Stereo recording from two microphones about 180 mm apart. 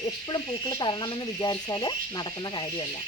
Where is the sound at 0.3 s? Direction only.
25° left (ahead or behind).